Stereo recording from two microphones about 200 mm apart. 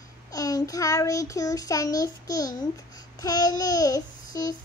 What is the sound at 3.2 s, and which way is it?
Child singing, 20° left (ahead or behind).